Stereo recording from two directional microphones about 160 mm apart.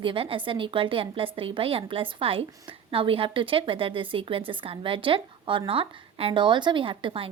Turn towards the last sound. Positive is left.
turn(degrees=-35)  # may be behind; listen again after turning